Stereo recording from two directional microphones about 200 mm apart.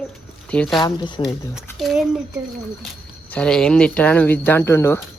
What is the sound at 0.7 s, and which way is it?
Speech, 25° left (ahead or behind).